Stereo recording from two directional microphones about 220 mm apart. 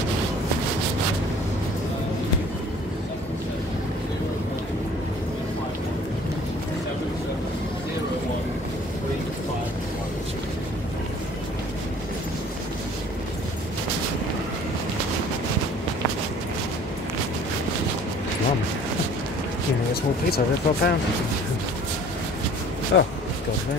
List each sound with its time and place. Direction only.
20.2 s speech: 45° left (ahead or behind)
22.9 s speech: 55° left (ahead or behind)